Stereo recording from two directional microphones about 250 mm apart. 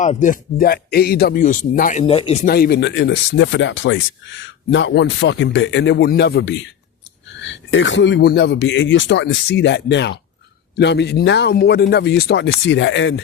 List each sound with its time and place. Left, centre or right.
0.0 s speech: left